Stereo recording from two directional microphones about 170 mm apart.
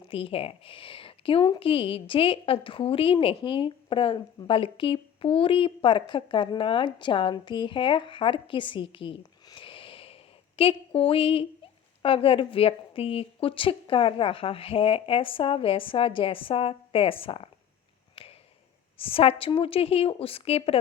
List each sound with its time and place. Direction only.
0.1 s a woman's voice: 35° left (ahead or behind)
18.1 s a sound: 35° left (ahead or behind)
18.9 s a woman's voice: 30° left (ahead or behind)